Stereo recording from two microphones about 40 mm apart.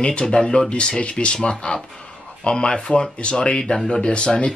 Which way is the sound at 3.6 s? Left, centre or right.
Centre.